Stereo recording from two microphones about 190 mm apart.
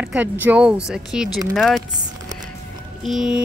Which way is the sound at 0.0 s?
5° right (ahead or behind).